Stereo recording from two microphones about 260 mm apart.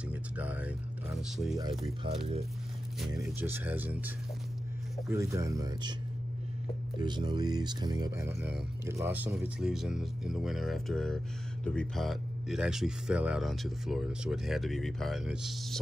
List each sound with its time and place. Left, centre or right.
0.1 s a sound: centre
2.0 s speech: right
3.2 s speech: centre
5.1 s speech: centre
7.0 s speech: centre